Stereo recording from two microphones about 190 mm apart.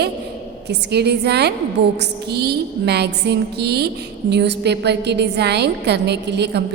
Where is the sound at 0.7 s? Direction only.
60° right (ahead or behind).